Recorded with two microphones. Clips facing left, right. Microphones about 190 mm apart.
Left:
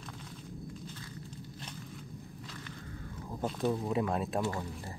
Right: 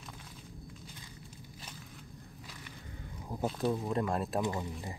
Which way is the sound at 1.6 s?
5° right (ahead or behind).